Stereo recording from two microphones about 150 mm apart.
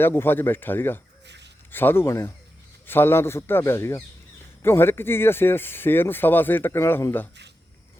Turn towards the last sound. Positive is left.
turn(degrees=15)  # may be behind; listen again after turning